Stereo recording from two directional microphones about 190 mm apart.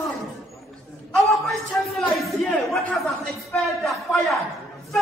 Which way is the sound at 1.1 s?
Centre (ahead or behind).